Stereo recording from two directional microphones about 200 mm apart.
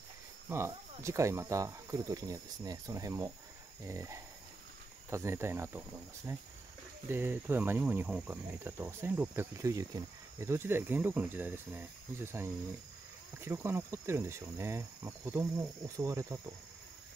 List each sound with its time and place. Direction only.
0.5 s cricket: 15° right (ahead or behind)